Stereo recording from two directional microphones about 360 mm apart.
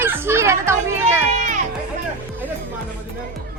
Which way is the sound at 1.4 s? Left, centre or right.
Right.